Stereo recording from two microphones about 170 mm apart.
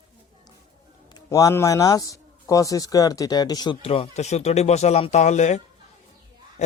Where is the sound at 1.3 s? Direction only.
20° left (ahead or behind).